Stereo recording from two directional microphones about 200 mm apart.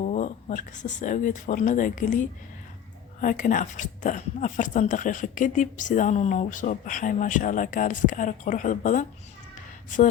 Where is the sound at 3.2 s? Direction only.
40° left (ahead or behind).